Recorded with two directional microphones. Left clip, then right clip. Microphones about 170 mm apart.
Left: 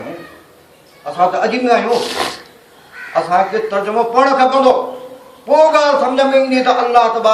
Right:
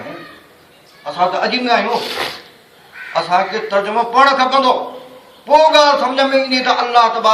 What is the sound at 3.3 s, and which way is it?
Speech, centre (ahead or behind).